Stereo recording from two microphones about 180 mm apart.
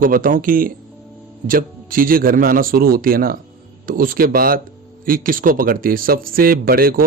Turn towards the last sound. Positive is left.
turn(degrees=-55)  # may be behind; listen again after turning